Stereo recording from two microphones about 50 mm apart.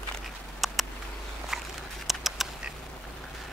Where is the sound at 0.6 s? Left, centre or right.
Centre.